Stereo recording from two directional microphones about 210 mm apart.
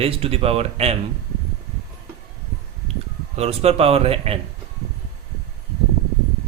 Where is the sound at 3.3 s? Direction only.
30° right (ahead or behind).